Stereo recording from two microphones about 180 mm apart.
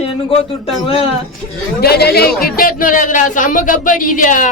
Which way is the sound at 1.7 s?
60° left (ahead or behind).